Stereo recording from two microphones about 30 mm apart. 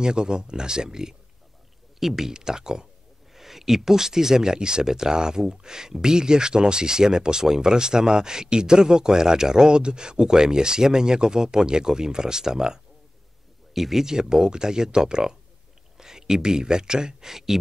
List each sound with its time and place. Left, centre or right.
0.0 s speech: right; by 2.3 s centre
2.3 s speech: right
3.3 s speech: centre
13.7 s speech: centre
14.3 s speech: right